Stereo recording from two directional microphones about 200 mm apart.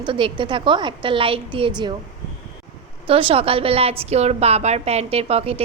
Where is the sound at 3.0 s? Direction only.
25° right (ahead or behind).